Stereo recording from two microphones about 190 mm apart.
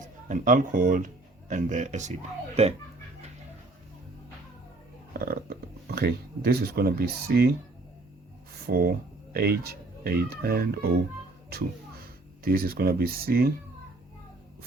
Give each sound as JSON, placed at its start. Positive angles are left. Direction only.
{"t": 0.0, "sound": "speech", "side_deg": -40}
{"t": 5.1, "sound": "speech", "side_deg": -55}
{"t": 8.6, "sound": "speech", "side_deg": -55}
{"t": 12.5, "sound": "speech", "side_deg": -55}